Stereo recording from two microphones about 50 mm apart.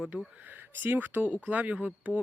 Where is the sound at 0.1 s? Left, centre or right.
Right.